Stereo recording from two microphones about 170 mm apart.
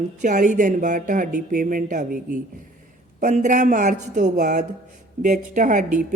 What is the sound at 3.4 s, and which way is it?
Speech, 45° right (ahead or behind).